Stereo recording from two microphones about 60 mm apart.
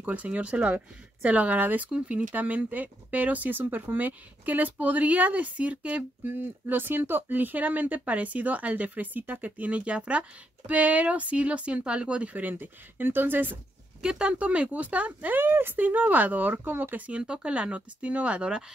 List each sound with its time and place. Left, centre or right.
0.0 s speech: right
6.3 s speech: right
14.0 s speech: centre